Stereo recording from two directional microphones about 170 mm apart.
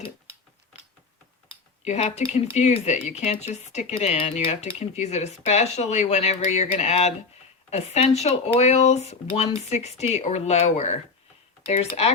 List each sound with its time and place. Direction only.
1.8 s speech: 40° left (ahead or behind)